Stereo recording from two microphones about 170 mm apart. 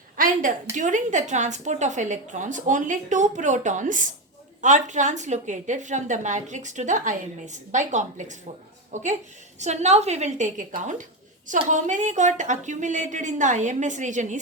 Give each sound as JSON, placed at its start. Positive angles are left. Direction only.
{"t": 0.2, "sound": "a woman's voice", "side_deg": -50}